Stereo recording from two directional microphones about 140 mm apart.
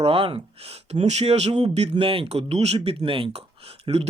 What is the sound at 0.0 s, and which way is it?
Speech, 45° right (ahead or behind).